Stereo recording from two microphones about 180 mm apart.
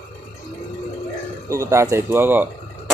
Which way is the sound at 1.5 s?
15° right (ahead or behind).